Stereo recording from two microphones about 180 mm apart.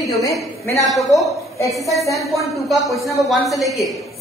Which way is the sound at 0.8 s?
Centre (ahead or behind).